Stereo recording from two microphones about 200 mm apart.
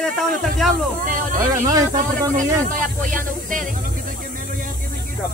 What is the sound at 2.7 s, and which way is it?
Speech, 40° right (ahead or behind).